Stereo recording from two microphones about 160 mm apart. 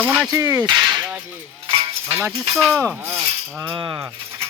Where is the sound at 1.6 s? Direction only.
30° right (ahead or behind).